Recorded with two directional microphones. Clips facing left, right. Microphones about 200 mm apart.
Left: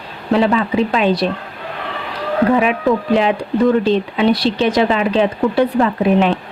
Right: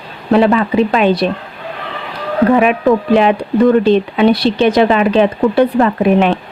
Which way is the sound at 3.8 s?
60° right (ahead or behind).